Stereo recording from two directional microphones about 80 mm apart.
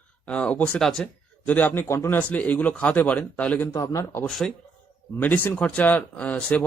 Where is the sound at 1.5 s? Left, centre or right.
Left.